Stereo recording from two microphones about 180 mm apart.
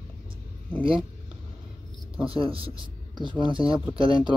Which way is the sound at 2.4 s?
30° right (ahead or behind).